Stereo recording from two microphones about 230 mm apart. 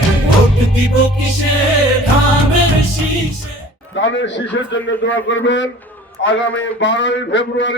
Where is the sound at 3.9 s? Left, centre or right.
Left.